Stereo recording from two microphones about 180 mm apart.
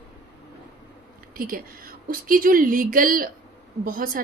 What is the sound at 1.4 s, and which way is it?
Speech, 50° right (ahead or behind).